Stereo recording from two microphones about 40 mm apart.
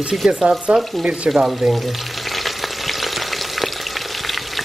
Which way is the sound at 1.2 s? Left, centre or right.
Centre.